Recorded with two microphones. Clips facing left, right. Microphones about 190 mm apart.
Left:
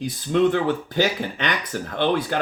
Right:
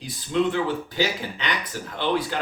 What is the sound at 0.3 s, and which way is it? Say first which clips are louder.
Speech: left 4 dB; 55° left (ahead or behind).